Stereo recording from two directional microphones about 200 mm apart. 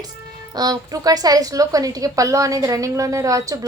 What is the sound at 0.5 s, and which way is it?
A woman's voice, 20° right (ahead or behind).